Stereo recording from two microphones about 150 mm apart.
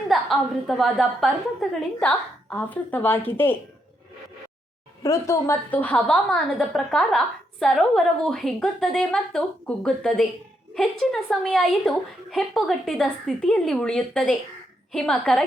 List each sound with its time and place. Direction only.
0.1 s a woman's voice: centre (ahead or behind)
5.0 s a woman's voice: 20° left (ahead or behind); by 15.4 s 5° left (ahead or behind)